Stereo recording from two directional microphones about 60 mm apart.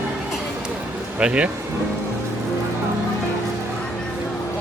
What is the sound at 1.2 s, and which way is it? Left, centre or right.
Speech, centre.